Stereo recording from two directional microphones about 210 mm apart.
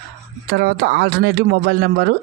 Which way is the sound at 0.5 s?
55° right (ahead or behind).